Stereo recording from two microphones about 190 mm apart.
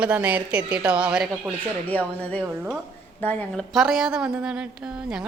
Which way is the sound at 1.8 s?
10° left (ahead or behind).